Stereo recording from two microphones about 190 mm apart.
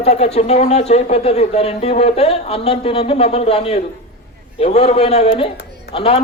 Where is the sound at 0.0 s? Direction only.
30° left (ahead or behind).